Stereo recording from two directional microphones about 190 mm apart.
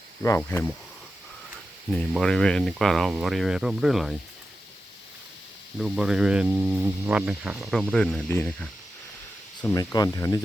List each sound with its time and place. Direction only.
0.2 s speech: 10° left (ahead or behind)
1.9 s speech: 5° left (ahead or behind)
5.8 s speech: 5° right (ahead or behind)
9.7 s speech: 20° left (ahead or behind)